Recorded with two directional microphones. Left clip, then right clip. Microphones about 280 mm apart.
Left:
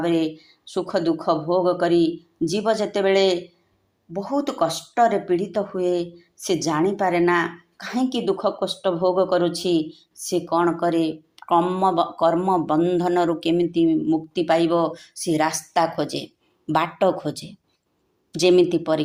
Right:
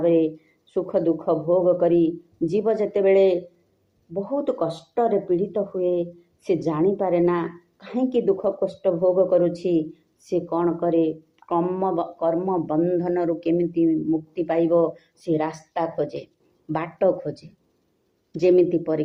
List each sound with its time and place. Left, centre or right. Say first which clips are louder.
0.0 s speech: right 3 dB; left